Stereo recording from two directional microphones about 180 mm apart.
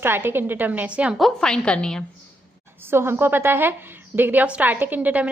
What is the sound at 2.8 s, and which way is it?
A woman's voice, 15° right (ahead or behind).